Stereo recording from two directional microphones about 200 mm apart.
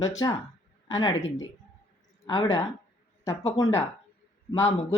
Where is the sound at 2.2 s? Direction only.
20° left (ahead or behind).